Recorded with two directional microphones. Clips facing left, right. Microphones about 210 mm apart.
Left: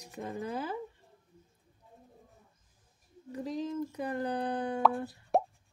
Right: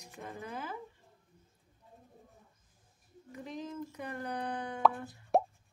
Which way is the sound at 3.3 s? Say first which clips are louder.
Left 7 dB; 35° left (ahead or behind).